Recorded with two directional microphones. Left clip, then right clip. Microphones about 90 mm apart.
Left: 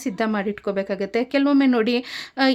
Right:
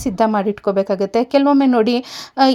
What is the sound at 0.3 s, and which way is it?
A woman's voice, 35° right (ahead or behind).